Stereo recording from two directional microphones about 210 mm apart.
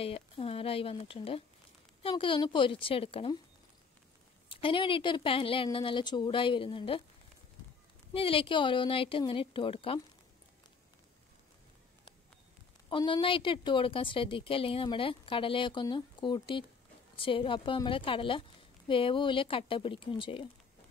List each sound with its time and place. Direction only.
0.0 s a woman's voice: 25° left (ahead or behind)
4.5 s a woman's voice: 25° left (ahead or behind)
8.1 s a woman's voice: 25° left (ahead or behind)
12.9 s a woman's voice: 25° left (ahead or behind)